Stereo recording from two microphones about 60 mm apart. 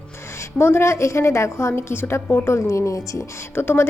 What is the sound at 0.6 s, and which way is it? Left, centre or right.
A woman's voice, left.